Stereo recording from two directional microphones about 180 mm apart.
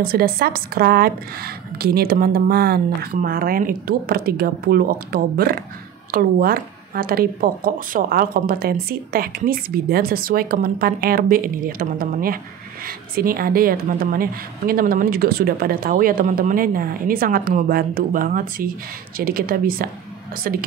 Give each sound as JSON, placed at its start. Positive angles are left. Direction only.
{"t": 0.0, "sound": "a woman's voice", "side_deg": -55}